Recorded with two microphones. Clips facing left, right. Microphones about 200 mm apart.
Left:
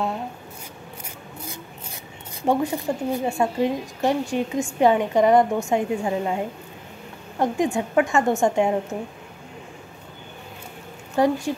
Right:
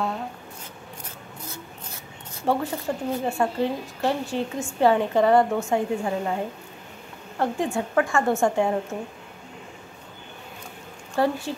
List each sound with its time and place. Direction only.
2.4 s a woman's voice: 15° left (ahead or behind)
11.1 s a woman's voice: 15° left (ahead or behind)